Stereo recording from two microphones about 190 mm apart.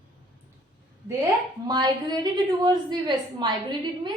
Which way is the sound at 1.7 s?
20° right (ahead or behind).